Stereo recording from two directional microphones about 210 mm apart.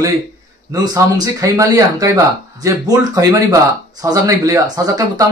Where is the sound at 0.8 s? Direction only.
20° right (ahead or behind).